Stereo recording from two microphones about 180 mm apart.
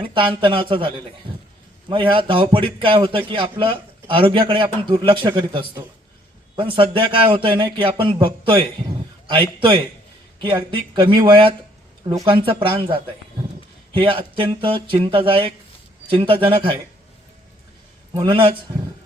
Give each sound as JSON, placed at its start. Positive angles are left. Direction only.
{"t": 0.0, "sound": "a man's voice", "side_deg": -25}
{"t": 18.1, "sound": "a man's voice", "side_deg": -30}